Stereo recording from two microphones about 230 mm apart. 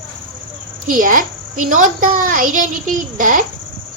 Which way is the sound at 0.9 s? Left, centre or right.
Right.